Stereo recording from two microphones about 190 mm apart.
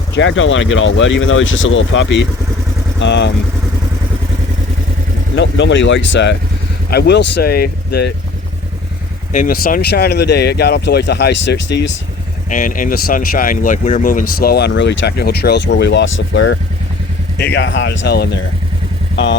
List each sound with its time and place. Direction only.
0.1 s speech: 75° left (ahead or behind)
3.0 s speech: 65° left (ahead or behind)
5.4 s speech: 70° left (ahead or behind); by 8.1 s 55° left (ahead or behind)
9.3 s speech: 45° left (ahead or behind); by 11.9 s 65° left (ahead or behind)
12.5 s speech: 45° left (ahead or behind); by 16.6 s 70° left (ahead or behind)
17.3 s speech: 60° left (ahead or behind)
19.1 s speech: 70° left (ahead or behind)